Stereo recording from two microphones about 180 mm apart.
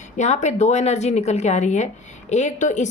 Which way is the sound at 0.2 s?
40° left (ahead or behind).